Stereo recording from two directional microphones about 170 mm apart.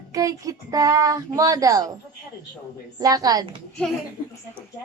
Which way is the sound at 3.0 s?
20° right (ahead or behind).